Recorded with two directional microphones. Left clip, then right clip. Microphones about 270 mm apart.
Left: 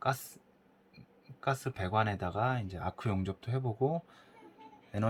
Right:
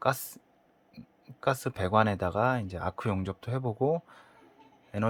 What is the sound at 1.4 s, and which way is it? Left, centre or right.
Speech, right.